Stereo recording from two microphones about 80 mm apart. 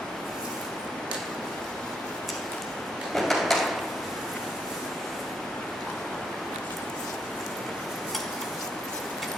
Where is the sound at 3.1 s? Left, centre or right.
Centre.